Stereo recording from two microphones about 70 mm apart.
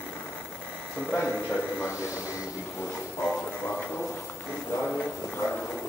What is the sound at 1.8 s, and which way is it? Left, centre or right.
Speech, left.